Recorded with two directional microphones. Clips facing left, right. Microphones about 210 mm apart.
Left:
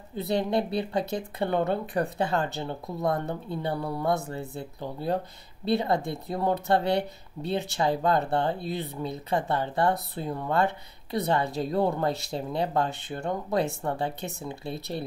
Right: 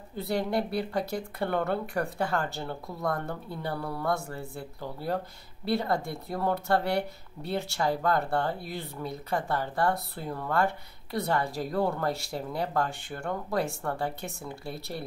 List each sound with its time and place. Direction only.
0.1 s speech: 20° left (ahead or behind)